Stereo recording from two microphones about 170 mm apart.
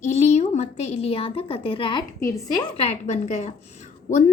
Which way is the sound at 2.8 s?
40° left (ahead or behind).